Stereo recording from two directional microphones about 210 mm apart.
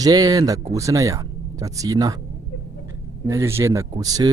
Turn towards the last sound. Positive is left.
turn(degrees=-15)  # may be behind; listen again after turning